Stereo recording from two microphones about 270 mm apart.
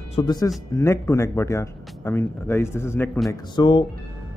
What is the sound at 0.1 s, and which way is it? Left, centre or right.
A man's voice, centre.